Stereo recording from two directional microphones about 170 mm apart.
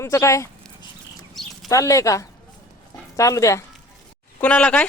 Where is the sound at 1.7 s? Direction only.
20° left (ahead or behind).